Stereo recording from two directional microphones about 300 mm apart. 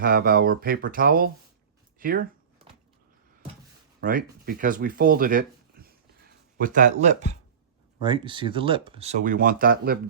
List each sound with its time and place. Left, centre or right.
0.0 s speech: right
2.0 s a sound: right
4.0 s speech: right